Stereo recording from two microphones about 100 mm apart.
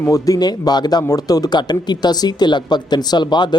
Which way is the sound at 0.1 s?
40° left (ahead or behind).